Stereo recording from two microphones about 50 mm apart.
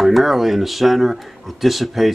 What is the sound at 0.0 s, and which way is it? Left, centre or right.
Speech, centre.